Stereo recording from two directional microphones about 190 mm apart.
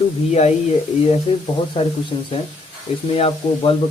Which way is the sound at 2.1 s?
30° left (ahead or behind).